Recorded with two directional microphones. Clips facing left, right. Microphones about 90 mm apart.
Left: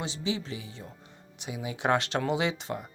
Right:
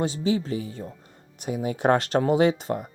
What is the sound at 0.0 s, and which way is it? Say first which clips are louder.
Speech: right 8 dB; 45° right (ahead or behind).